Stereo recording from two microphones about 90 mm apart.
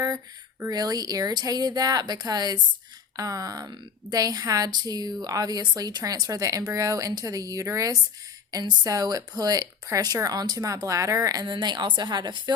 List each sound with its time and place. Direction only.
0.7 s speech: 45° right (ahead or behind)
11.5 s a woman's voice: 55° right (ahead or behind)